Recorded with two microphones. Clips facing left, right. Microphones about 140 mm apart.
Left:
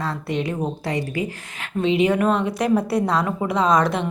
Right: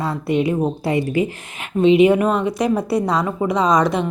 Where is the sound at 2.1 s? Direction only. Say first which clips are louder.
Right 2 dB; 5° right (ahead or behind).